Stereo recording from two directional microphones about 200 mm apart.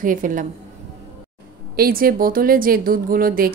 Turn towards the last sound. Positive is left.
turn(degrees=-45)  # may be behind; listen again after turning